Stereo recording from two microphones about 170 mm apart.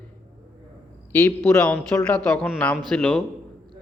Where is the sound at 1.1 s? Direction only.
10° left (ahead or behind).